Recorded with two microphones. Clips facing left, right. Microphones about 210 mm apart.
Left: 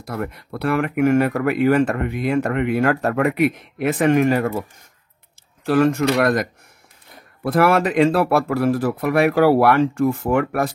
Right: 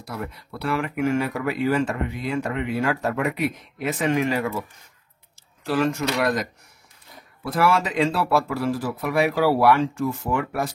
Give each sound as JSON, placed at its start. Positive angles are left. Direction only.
{"t": 0.0, "sound": "speech", "side_deg": 55}
{"t": 5.7, "sound": "speech", "side_deg": 55}
{"t": 7.4, "sound": "speech", "side_deg": 60}